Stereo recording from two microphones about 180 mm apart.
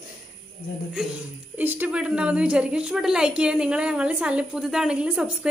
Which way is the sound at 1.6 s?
10° right (ahead or behind).